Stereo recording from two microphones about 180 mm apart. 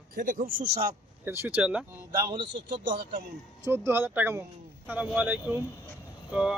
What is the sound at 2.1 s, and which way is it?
Speech, 20° right (ahead or behind).